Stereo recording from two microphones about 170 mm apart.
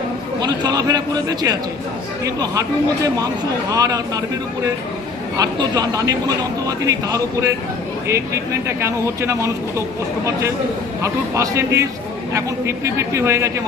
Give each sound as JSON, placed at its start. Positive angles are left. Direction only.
{"t": 0.4, "sound": "a man's voice", "side_deg": -25}
{"t": 3.7, "sound": "a man's voice", "side_deg": -20}
{"t": 5.4, "sound": "a man's voice", "side_deg": -20}
{"t": 8.6, "sound": "speech", "side_deg": -15}
{"t": 11.0, "sound": "speech", "side_deg": -15}